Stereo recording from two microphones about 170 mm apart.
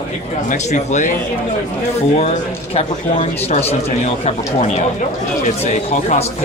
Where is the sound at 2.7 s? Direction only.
35° left (ahead or behind).